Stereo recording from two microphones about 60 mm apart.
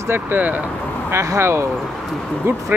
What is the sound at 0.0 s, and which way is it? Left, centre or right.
Speech, right.